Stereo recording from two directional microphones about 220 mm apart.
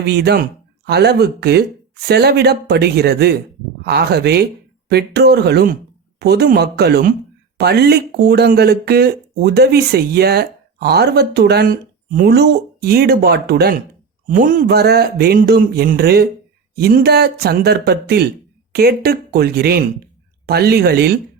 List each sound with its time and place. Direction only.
0.0 s speech: 50° right (ahead or behind)